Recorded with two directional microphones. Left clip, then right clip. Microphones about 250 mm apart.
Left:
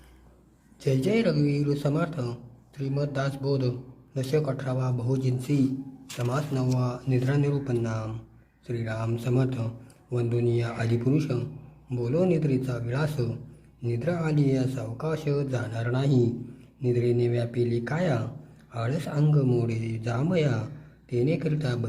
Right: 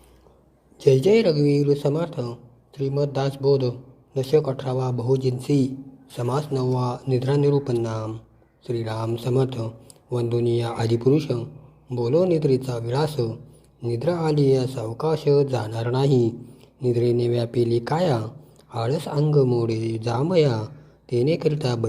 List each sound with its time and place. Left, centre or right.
0.8 s a man's voice: centre